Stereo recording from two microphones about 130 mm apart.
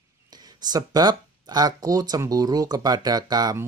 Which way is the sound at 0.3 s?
30° right (ahead or behind).